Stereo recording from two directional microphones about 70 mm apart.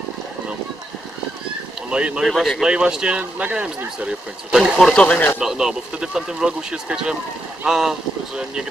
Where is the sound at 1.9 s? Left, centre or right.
Centre.